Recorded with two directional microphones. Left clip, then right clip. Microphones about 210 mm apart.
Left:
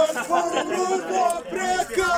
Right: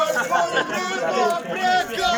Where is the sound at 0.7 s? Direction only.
35° left (ahead or behind).